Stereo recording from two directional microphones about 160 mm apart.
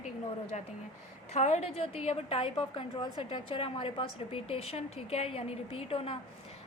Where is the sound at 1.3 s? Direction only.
40° left (ahead or behind).